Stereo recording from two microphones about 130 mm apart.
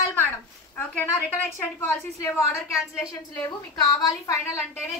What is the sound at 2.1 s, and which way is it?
A woman's voice, 20° left (ahead or behind).